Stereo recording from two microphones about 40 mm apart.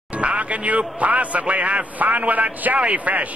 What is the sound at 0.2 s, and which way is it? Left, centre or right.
Speech, right.